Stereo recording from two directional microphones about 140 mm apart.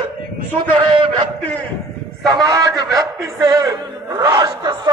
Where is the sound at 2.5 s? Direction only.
25° right (ahead or behind).